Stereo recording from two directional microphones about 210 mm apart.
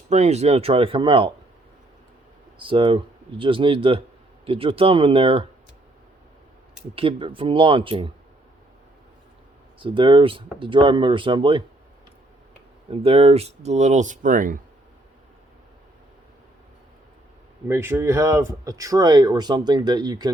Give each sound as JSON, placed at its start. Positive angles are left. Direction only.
{"t": 0.1, "sound": "speech", "side_deg": -30}
{"t": 2.6, "sound": "speech", "side_deg": -25}
{"t": 6.9, "sound": "speech", "side_deg": -25}
{"t": 9.8, "sound": "speech", "side_deg": -25}
{"t": 12.9, "sound": "speech", "side_deg": -30}
{"t": 17.7, "sound": "speech", "side_deg": -10}